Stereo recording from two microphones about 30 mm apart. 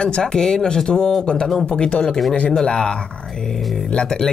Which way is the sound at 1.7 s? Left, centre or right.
Left.